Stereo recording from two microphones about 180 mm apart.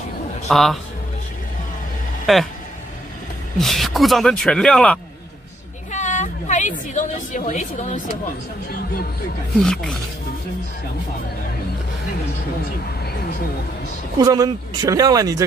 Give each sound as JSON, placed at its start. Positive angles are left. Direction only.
{"t": 0.5, "sound": "speech", "side_deg": 0}
{"t": 2.3, "sound": "speech", "side_deg": 0}
{"t": 3.5, "sound": "speech", "side_deg": 0}
{"t": 5.9, "sound": "a woman's voice", "side_deg": 40}
{"t": 9.6, "sound": "speech", "side_deg": 5}
{"t": 14.1, "sound": "speech", "side_deg": -20}